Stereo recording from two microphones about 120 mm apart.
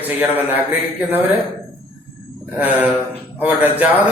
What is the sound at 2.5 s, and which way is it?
Speech, 15° right (ahead or behind).